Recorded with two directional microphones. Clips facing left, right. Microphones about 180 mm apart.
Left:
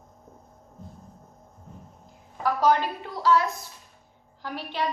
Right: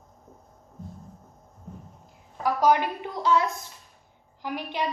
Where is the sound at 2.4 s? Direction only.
15° right (ahead or behind).